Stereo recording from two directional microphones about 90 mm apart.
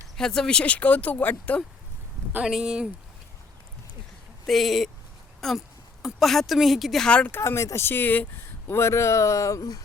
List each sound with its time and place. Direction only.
0.2 s speech: 5° left (ahead or behind)
2.4 s speech: 5° right (ahead or behind)
4.4 s a woman's voice: centre (ahead or behind)
7.3 s speech: 25° left (ahead or behind)